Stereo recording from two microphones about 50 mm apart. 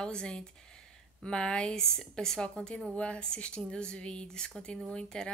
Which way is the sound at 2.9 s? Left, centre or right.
Left.